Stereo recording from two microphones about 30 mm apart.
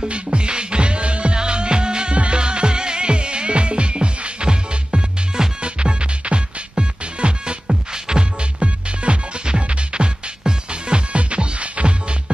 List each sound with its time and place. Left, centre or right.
0.1 s music: right
7.6 s music: right